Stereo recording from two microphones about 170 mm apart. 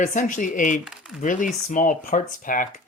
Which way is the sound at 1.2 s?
50° left (ahead or behind).